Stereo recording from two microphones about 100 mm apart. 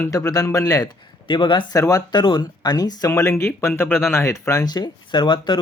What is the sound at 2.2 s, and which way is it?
Speech, 50° left (ahead or behind).